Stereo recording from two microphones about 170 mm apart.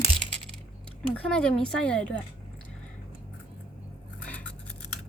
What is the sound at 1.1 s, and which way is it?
Speech, 5° left (ahead or behind).